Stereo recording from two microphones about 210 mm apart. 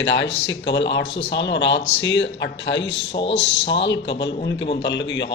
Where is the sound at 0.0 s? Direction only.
60° left (ahead or behind).